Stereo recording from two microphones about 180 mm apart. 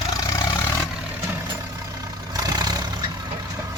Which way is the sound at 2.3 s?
20° right (ahead or behind).